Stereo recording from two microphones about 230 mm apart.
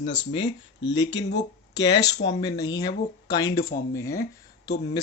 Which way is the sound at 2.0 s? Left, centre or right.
Left.